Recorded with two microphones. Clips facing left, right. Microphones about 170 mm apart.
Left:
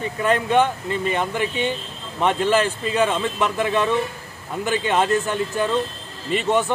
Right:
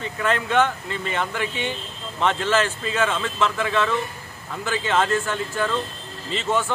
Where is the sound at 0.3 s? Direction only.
10° left (ahead or behind).